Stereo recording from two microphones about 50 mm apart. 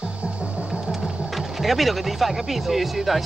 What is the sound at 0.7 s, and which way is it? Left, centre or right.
Music, centre.